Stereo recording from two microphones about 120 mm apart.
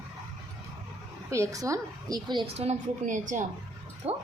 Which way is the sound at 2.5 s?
65° right (ahead or behind).